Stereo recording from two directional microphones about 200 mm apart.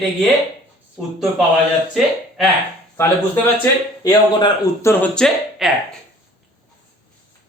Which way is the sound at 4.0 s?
20° left (ahead or behind).